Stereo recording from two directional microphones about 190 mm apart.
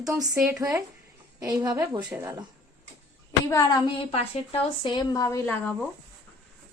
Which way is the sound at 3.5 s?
20° left (ahead or behind).